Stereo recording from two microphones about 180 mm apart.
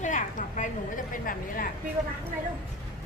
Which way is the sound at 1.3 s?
50° left (ahead or behind).